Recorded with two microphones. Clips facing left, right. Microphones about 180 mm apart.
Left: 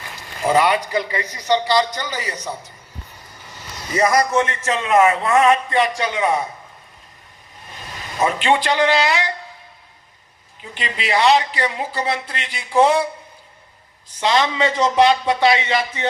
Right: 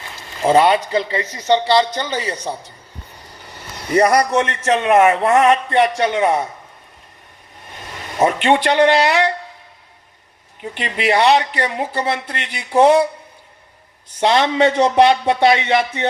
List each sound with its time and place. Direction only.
0.4 s a man's voice: 30° right (ahead or behind)
3.4 s a man's voice: 60° right (ahead or behind)
7.9 s a man's voice: 60° right (ahead or behind)
10.6 s a man's voice: 55° right (ahead or behind)
14.2 s a man's voice: 60° right (ahead or behind)